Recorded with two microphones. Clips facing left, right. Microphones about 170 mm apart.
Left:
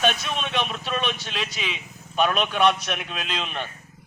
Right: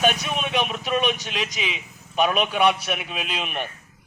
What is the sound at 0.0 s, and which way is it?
A man's voice, 10° right (ahead or behind).